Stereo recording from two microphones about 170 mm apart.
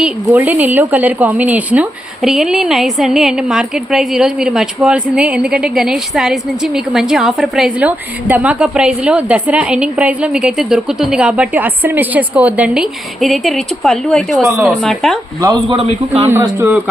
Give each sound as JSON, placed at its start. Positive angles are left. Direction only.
{"t": 0.0, "sound": "speech", "side_deg": -10}
{"t": 15.4, "sound": "a man's voice", "side_deg": -15}